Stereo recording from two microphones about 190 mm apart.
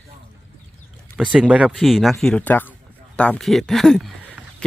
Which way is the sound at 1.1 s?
5° right (ahead or behind).